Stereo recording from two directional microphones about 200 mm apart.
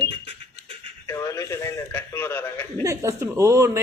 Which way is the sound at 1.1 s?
15° left (ahead or behind).